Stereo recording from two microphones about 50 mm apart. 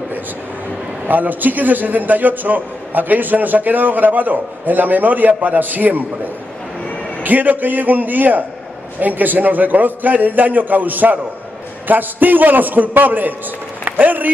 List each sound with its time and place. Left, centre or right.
1.0 s a man's voice: right
7.2 s a man's voice: right